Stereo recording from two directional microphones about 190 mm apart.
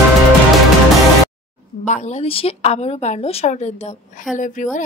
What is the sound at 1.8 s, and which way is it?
A woman's voice, 40° left (ahead or behind).